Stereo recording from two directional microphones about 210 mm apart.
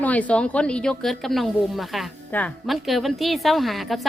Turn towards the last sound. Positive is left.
turn(degrees=0)  # may be behind; listen again after turning